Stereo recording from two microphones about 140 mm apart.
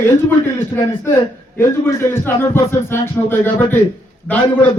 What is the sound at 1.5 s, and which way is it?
A man's voice, 20° left (ahead or behind).